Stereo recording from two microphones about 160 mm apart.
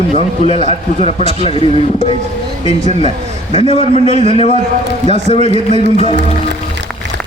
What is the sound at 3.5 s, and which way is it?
A man's voice, 35° left (ahead or behind).